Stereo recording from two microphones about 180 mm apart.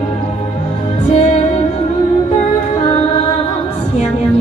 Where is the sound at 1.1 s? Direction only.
40° left (ahead or behind).